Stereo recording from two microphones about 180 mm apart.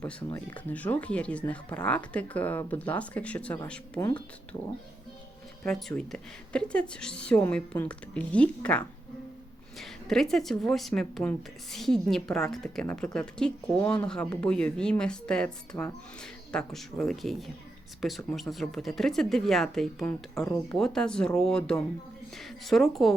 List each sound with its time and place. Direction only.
0.3 s speech: 10° left (ahead or behind)
5.6 s speech: 5° left (ahead or behind)